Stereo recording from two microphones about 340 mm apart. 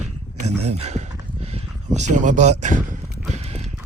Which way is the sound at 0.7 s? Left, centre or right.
Centre.